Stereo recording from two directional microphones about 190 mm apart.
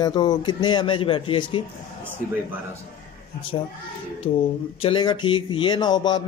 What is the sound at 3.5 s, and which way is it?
Speech, 25° left (ahead or behind).